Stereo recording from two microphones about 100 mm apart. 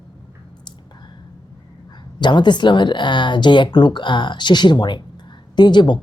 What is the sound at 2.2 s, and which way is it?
Speech, 50° left (ahead or behind).